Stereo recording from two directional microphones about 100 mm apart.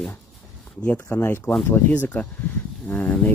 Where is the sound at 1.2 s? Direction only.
25° left (ahead or behind).